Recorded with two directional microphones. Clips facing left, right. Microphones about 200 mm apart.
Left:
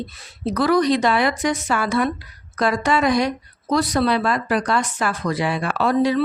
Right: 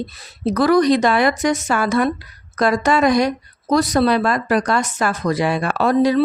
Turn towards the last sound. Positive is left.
turn(degrees=-40)  # may be behind; listen again after turning